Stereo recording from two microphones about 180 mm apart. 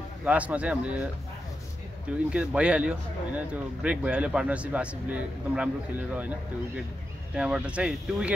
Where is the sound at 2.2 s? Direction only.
5° right (ahead or behind).